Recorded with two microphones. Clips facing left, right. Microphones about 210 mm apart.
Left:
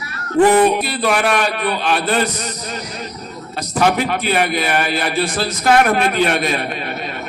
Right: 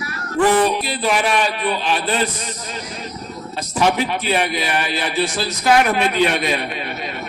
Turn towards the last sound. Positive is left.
turn(degrees=45)  # may be behind; listen again after turning